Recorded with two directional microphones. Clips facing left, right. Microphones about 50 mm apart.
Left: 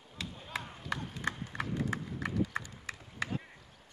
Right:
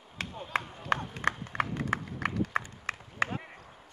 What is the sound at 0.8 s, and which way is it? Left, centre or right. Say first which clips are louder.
Run: right 6 dB; right.